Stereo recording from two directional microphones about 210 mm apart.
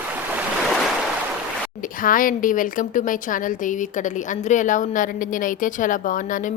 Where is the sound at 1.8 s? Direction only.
40° left (ahead or behind).